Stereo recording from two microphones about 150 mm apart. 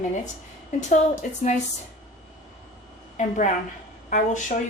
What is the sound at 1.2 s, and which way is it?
Speech, 60° left (ahead or behind).